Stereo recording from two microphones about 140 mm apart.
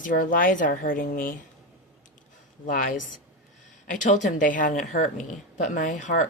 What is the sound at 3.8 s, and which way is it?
A woman's voice, 65° left (ahead or behind).